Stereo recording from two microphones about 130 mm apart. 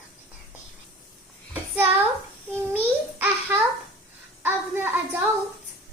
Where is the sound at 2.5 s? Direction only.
15° right (ahead or behind).